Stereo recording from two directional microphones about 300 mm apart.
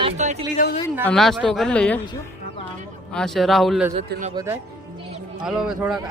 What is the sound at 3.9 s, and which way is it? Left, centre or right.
Speech, right.